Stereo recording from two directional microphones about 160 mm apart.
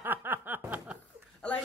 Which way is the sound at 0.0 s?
15° right (ahead or behind).